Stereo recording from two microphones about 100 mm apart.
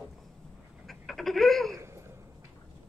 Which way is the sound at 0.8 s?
Centre (ahead or behind).